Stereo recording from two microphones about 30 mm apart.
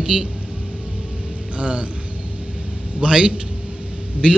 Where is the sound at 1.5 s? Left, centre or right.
Right.